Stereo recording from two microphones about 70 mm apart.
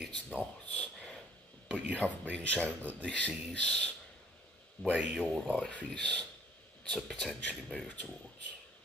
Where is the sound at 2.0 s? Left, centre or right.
Left.